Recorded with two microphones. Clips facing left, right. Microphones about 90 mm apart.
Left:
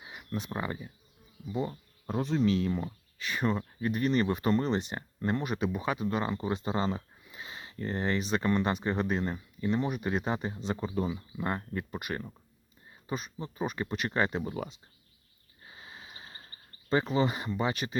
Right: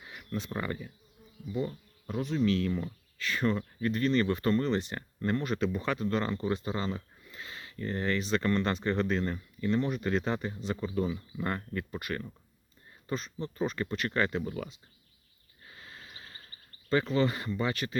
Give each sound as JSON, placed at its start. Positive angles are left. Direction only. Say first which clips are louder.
{"t": 0.0, "sound": "speech", "louder": "even", "side_deg": 20}
{"t": 2.0, "sound": "insect", "louder": "left 1 dB", "side_deg": 35}
{"t": 2.5, "sound": "speech", "louder": "left 1 dB", "side_deg": 20}
{"t": 7.3, "sound": "a sound", "louder": "even", "side_deg": 20}
{"t": 7.8, "sound": "speech", "louder": "even", "side_deg": 25}
{"t": 15.6, "sound": "a sound", "louder": "left 1 dB", "side_deg": 20}